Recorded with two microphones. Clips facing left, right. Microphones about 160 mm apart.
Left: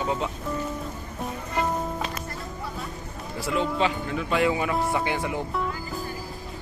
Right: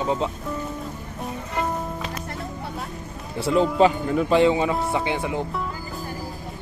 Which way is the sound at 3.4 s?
35° right (ahead or behind).